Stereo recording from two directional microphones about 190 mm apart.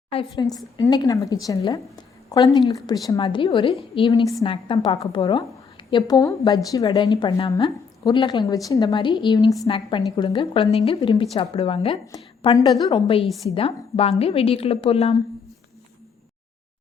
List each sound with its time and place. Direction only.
0.1 s a woman's voice: 25° left (ahead or behind)
13.2 s a woman's voice: centre (ahead or behind)
13.5 s a woman's voice: 30° left (ahead or behind)